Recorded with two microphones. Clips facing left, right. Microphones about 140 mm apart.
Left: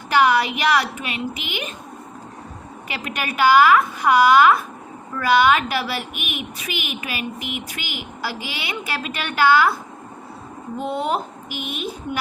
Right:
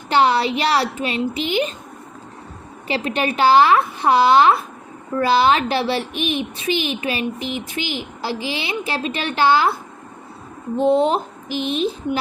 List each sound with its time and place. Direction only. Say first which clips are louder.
0.1 s speech: right 1 dB; 30° right (ahead or behind)
2.8 s a child's voice: right 7 dB; 30° right (ahead or behind)
10.8 s a child's voice: right 7 dB; 25° right (ahead or behind)